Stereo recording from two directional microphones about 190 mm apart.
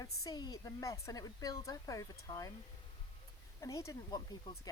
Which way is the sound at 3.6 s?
15° left (ahead or behind).